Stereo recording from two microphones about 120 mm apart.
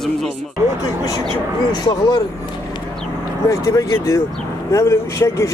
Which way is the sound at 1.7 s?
35° left (ahead or behind).